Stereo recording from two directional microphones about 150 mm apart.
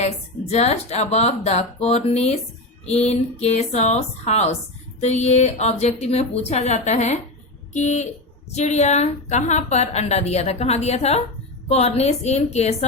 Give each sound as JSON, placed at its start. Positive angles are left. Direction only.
{"t": 0.5, "sound": "a woman's voice", "side_deg": 45}